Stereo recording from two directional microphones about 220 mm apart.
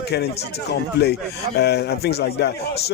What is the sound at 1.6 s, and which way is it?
Speech, 50° left (ahead or behind).